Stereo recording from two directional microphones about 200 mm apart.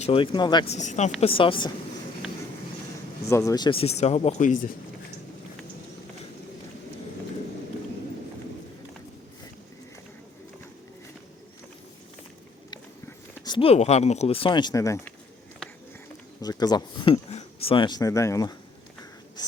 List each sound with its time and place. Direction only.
0.0 s speech: 25° left (ahead or behind)
0.8 s speech: 35° left (ahead or behind)
3.2 s speech: 15° left (ahead or behind); by 4.7 s 40° left (ahead or behind)
13.4 s speech: 25° left (ahead or behind)
16.4 s speech: 20° left (ahead or behind)
19.4 s writing: 20° left (ahead or behind)